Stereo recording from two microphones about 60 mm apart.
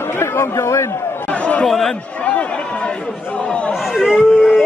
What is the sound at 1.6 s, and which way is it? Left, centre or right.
Speech, centre.